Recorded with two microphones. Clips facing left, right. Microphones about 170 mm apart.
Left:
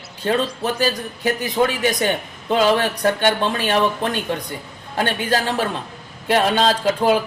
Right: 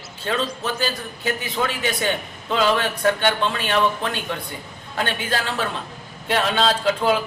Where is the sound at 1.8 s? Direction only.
40° left (ahead or behind).